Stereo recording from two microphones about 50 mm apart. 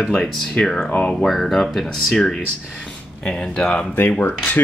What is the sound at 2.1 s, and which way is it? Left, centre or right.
Speech, centre.